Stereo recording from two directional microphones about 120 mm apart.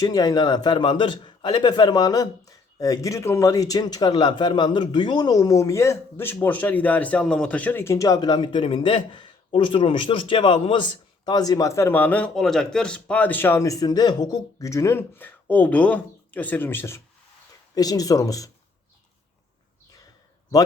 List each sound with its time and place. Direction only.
0.0 s a man's voice: 35° left (ahead or behind)
17.7 s speech: 30° left (ahead or behind)